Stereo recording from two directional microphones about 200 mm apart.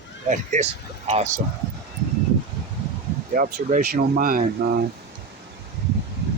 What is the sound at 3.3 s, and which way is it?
Speech, 45° right (ahead or behind).